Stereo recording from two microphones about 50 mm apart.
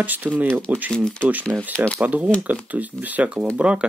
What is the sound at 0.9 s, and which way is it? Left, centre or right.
Speech, centre.